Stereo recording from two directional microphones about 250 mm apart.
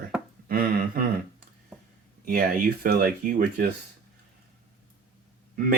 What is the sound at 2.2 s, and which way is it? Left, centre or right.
Speech, right.